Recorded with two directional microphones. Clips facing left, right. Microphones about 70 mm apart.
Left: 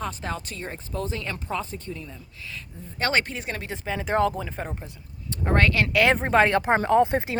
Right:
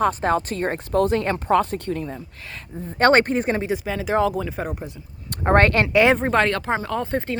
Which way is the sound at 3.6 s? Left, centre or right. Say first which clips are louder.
Right 10 dB; centre.